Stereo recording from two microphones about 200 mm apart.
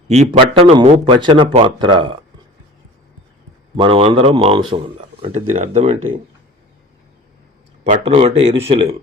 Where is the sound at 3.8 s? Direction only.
25° right (ahead or behind).